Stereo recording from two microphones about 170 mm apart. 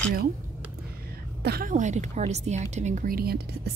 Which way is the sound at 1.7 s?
45° right (ahead or behind).